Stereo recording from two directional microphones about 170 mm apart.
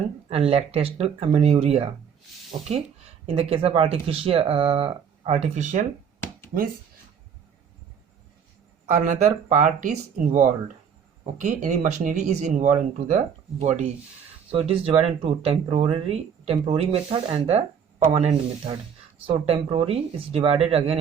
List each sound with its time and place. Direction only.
0.3 s speech: 35° right (ahead or behind)
8.9 s speech: 45° right (ahead or behind)